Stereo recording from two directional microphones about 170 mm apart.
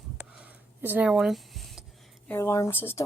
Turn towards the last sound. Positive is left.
turn(degrees=15)  # may be behind; listen again after turning